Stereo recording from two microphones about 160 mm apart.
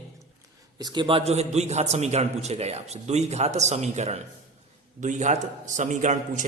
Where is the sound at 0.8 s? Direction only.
25° right (ahead or behind).